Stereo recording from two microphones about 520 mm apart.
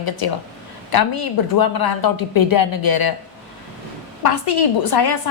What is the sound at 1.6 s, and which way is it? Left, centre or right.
A woman's voice, left.